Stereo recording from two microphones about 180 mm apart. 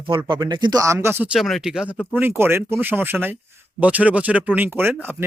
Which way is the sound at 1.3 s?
Centre (ahead or behind).